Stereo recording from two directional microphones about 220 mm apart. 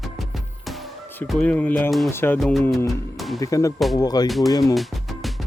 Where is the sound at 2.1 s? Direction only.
10° left (ahead or behind).